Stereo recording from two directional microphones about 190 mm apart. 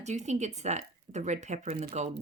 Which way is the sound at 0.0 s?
35° right (ahead or behind).